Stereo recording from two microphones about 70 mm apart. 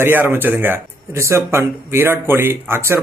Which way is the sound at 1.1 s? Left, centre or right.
Right.